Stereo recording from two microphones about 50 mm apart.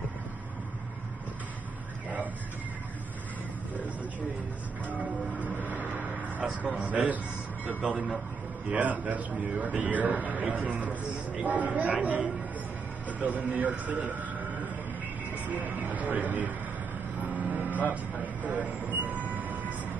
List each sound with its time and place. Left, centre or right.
5.6 s vehicle: right
6.9 s speech: right
8.6 s a man's voice: right
17.2 s vehicle: right
18.4 s train: right